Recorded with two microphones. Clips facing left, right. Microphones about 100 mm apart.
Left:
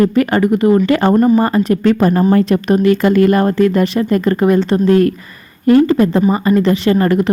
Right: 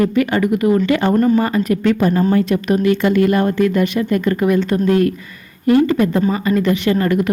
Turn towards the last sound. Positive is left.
turn(degrees=35)  # may be behind; listen again after turning